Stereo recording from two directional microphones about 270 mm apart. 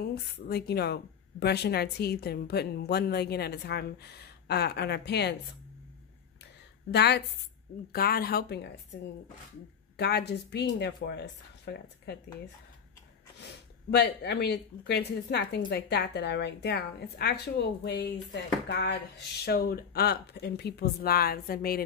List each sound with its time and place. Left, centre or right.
0.0 s a woman's voice: left
6.9 s a woman's voice: left
9.9 s a woman's voice: left
13.4 s a woman's voice: left